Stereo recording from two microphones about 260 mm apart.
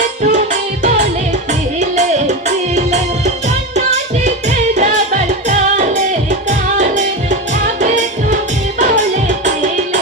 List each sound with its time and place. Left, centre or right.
0.0 s music: right
9.4 s music: right